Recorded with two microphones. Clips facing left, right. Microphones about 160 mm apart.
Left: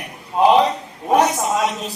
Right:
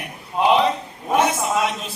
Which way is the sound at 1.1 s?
40° left (ahead or behind).